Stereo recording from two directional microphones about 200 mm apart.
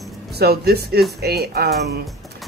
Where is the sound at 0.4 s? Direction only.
50° right (ahead or behind).